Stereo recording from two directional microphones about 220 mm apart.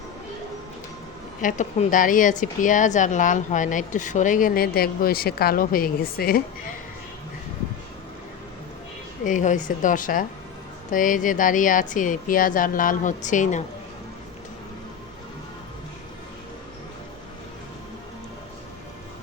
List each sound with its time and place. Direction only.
1.4 s a woman's voice: 35° left (ahead or behind)
9.2 s a woman's voice: 35° left (ahead or behind)